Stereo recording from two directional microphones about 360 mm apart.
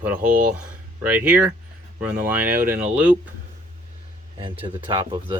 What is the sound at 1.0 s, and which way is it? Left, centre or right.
Speech, centre.